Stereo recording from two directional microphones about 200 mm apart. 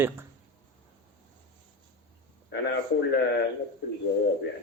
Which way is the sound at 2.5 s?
60° left (ahead or behind).